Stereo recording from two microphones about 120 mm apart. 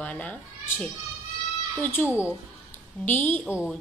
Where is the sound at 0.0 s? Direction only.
10° left (ahead or behind).